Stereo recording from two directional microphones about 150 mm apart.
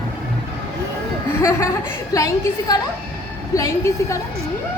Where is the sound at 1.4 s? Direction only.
20° left (ahead or behind).